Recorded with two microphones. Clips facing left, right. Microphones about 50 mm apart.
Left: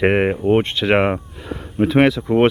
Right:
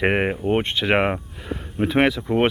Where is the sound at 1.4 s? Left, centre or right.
Centre.